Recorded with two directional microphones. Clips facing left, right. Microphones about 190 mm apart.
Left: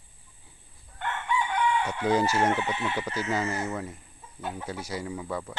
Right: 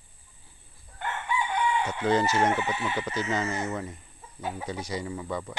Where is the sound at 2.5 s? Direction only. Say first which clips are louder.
Even; 5° right (ahead or behind).